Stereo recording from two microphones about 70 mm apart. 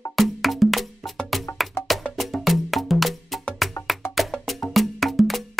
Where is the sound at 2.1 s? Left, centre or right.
Centre.